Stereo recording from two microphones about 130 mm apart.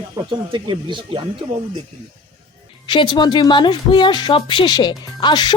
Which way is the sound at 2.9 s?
40° left (ahead or behind).